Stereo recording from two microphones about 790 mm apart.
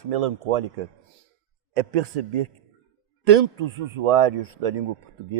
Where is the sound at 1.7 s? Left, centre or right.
Right.